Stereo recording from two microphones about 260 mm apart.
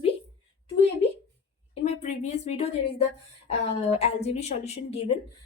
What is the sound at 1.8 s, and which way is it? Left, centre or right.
A woman's voice, left.